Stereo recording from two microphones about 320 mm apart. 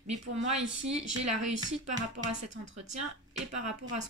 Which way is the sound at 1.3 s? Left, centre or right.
Right.